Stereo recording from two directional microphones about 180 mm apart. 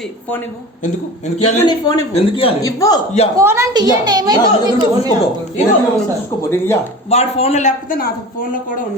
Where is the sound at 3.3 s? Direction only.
15° right (ahead or behind).